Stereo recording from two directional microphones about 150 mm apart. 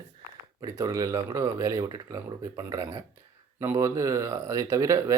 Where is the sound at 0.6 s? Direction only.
20° right (ahead or behind).